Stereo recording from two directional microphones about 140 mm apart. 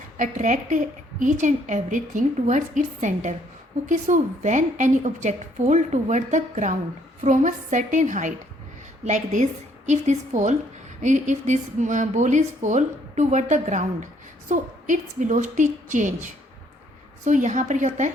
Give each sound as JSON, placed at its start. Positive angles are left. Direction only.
{"t": 0.2, "sound": "a woman's voice", "side_deg": -65}